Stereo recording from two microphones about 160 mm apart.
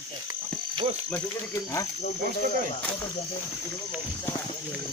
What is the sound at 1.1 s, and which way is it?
Speech, 20° left (ahead or behind).